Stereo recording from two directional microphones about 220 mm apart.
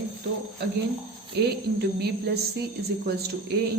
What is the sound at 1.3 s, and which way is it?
Speech, 50° right (ahead or behind).